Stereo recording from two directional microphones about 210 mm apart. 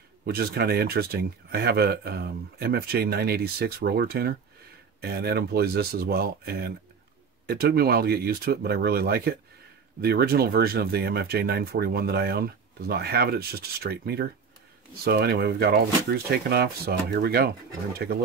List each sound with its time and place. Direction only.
0.2 s speech: 50° right (ahead or behind)